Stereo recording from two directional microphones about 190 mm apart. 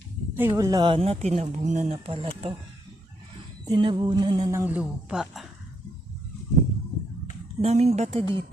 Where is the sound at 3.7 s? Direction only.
25° right (ahead or behind); by 5.5 s centre (ahead or behind).